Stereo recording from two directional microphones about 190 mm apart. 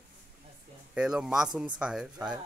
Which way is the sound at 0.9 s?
5° right (ahead or behind).